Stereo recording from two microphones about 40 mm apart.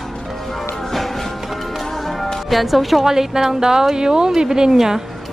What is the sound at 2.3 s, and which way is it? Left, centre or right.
A woman's voice, centre.